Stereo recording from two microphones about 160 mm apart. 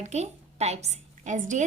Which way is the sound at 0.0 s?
45° right (ahead or behind).